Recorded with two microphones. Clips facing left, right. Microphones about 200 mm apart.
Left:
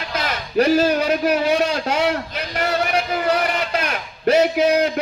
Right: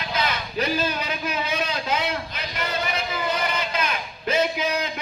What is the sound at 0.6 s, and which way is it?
A man's voice, 80° left.